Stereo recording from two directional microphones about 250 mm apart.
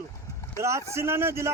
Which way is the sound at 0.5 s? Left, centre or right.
Centre.